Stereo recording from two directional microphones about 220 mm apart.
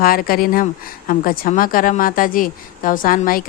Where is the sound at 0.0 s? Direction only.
40° left (ahead or behind).